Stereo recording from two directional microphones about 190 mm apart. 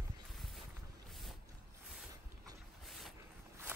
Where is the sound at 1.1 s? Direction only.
Centre (ahead or behind).